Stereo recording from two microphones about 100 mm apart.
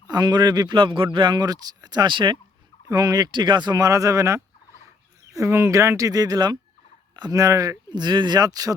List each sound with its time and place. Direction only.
0.1 s speech: 45° right (ahead or behind)
0.8 s speech: 60° right (ahead or behind)
2.8 s speech: 35° right (ahead or behind)